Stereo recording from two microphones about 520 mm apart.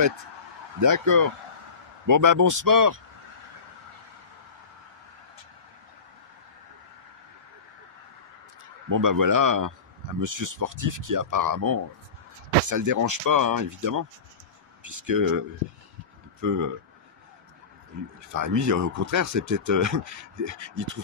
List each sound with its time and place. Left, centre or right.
0.7 s speech: right
8.8 s speech: right
18.3 s speech: right